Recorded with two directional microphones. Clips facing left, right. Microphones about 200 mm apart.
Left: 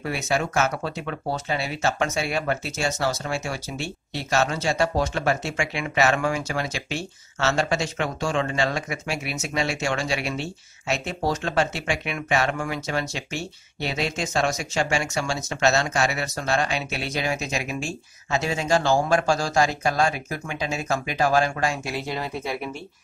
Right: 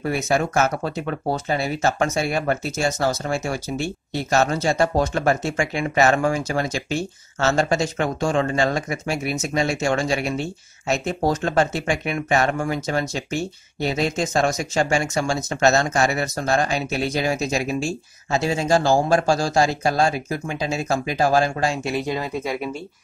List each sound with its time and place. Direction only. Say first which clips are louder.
0.0 s speech: right 4 dB; 45° right (ahead or behind)
21.9 s speech: right 5 dB; 15° right (ahead or behind)